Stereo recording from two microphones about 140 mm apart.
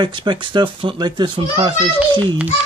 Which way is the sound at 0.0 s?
35° right (ahead or behind).